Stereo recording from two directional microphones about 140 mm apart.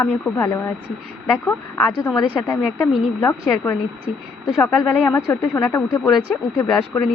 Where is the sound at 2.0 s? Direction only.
20° left (ahead or behind).